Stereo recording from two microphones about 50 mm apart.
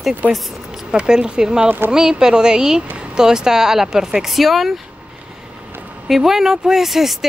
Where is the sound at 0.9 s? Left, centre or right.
Centre.